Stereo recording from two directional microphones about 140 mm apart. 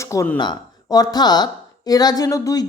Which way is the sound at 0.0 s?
20° left (ahead or behind).